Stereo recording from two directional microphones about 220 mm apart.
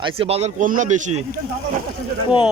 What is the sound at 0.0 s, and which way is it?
Speech, 25° right (ahead or behind).